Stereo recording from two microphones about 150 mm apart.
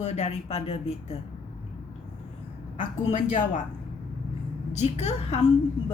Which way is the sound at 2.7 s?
55° left (ahead or behind).